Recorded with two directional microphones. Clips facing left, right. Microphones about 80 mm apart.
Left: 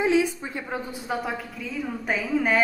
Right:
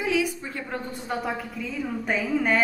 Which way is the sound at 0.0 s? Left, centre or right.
Left.